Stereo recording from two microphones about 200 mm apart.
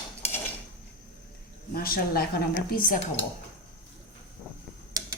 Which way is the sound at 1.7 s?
45° left (ahead or behind).